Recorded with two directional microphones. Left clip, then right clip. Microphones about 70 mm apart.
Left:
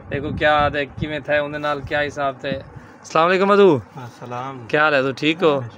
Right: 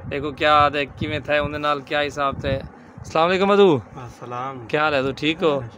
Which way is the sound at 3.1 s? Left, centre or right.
Centre.